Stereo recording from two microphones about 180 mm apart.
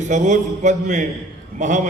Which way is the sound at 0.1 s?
40° right (ahead or behind).